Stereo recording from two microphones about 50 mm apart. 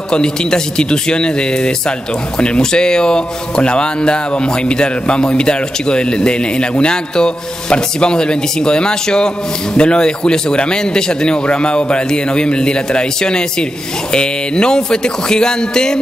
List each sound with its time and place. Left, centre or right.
0.1 s speech: centre